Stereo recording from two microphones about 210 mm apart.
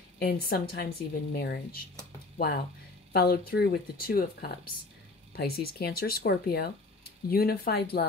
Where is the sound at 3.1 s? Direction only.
50° left (ahead or behind).